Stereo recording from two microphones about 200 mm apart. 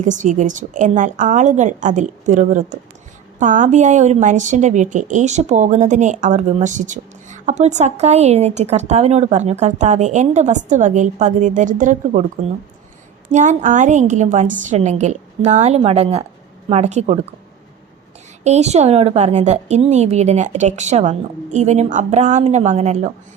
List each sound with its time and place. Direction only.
0.0 s speech: 40° right (ahead or behind)
13.3 s speech: 35° right (ahead or behind)
18.4 s speech: 35° right (ahead or behind)